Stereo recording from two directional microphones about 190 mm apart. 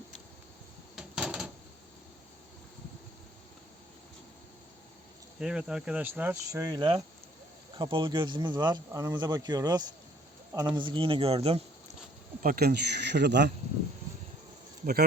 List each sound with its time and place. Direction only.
0.9 s drawer open or close: 5° right (ahead or behind)
5.4 s speech: 5° right (ahead or behind); by 11.9 s 30° right (ahead or behind)
12.4 s speech: 50° right (ahead or behind)